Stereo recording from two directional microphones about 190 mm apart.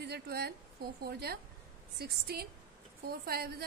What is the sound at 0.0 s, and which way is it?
A woman's voice, 60° right (ahead or behind).